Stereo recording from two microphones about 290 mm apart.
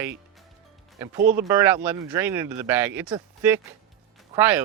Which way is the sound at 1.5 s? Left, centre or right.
Centre.